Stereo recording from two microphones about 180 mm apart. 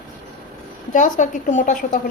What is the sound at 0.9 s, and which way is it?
A woman's voice, 45° left (ahead or behind).